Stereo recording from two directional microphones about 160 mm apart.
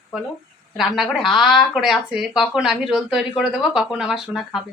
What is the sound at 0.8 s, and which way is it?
A woman's voice, centre (ahead or behind).